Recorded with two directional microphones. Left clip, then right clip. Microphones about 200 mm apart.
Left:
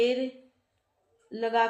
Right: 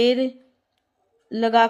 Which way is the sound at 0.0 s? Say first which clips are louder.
Right 7 dB; 50° right (ahead or behind).